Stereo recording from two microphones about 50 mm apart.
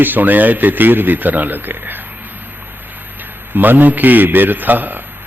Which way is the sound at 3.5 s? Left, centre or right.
Right.